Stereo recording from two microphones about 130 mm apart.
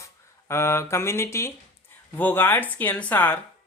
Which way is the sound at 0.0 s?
20° left (ahead or behind).